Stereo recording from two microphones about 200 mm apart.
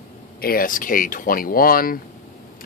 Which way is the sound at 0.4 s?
45° left (ahead or behind).